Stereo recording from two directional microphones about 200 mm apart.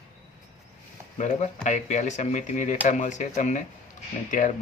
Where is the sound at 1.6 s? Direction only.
35° left (ahead or behind).